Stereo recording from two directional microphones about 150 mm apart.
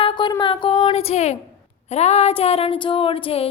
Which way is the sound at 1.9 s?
45° left (ahead or behind).